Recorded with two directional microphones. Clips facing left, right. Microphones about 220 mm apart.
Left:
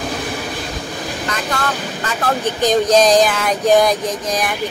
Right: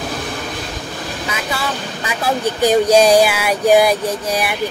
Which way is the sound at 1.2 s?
5° right (ahead or behind).